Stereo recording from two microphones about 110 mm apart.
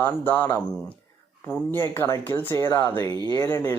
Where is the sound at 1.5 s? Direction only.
20° left (ahead or behind).